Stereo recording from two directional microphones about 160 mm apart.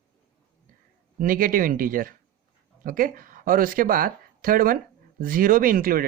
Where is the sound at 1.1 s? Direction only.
60° right (ahead or behind).